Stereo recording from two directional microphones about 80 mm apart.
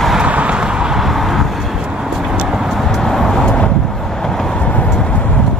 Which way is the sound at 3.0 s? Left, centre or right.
Centre.